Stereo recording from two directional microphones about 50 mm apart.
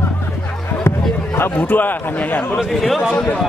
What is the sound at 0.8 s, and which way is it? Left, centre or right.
Speech, left.